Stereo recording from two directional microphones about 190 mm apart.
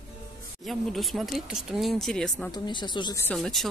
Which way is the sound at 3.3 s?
Centre (ahead or behind).